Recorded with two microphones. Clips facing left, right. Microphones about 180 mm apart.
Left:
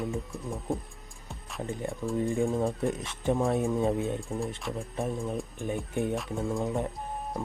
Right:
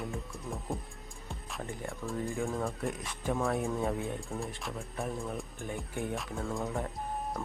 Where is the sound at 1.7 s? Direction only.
20° left (ahead or behind).